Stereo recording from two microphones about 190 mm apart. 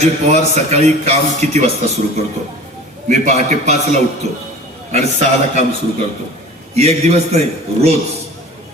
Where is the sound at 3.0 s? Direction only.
40° right (ahead or behind).